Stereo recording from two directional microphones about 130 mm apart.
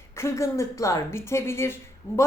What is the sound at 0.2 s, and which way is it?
A woman's voice, 20° left (ahead or behind).